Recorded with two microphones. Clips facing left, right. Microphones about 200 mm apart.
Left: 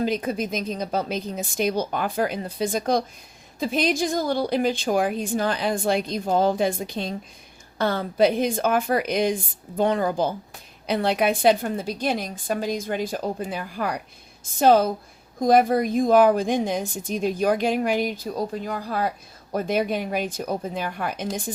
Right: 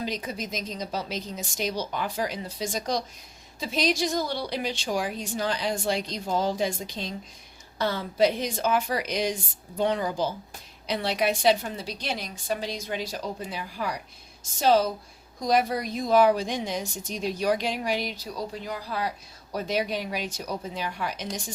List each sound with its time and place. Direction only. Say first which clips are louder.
0.0 s a woman's voice: left 8 dB; 55° left (ahead or behind)